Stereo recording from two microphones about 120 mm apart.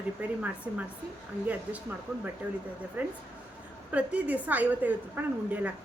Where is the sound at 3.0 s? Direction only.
15° right (ahead or behind).